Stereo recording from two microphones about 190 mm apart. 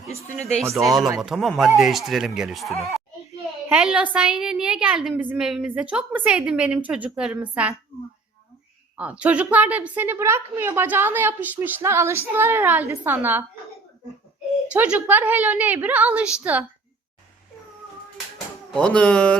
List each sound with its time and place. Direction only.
0.1 s speech: 35° left (ahead or behind)
0.8 s a woman's voice: centre (ahead or behind)
9.0 s a woman's voice: 5° right (ahead or behind)
14.7 s a woman's voice: 5° right (ahead or behind)
18.7 s a woman's voice: 5° left (ahead or behind)